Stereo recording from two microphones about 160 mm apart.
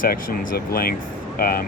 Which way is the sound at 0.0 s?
70° left (ahead or behind).